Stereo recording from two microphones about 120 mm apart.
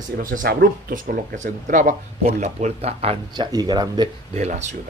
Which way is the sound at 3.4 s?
35° right (ahead or behind).